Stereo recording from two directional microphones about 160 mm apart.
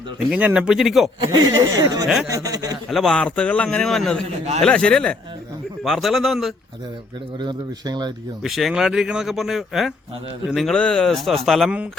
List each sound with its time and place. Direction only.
0.3 s speech: 10° right (ahead or behind)
1.3 s speech: 20° right (ahead or behind)
2.9 s speech: centre (ahead or behind)
7.3 s speech: 30° right (ahead or behind)
8.4 s speech: centre (ahead or behind)